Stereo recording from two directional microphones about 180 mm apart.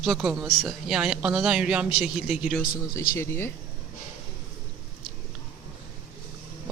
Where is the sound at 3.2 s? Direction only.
15° left (ahead or behind).